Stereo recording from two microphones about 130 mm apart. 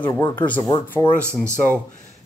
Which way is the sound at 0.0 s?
35° left (ahead or behind).